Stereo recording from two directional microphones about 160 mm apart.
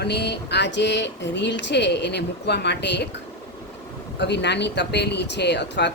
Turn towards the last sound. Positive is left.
turn(degrees=90)